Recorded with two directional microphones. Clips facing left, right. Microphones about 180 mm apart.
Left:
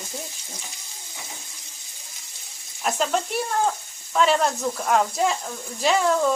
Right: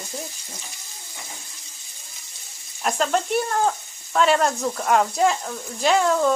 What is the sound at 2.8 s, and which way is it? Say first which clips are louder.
Speech: right 2 dB; centre (ahead or behind).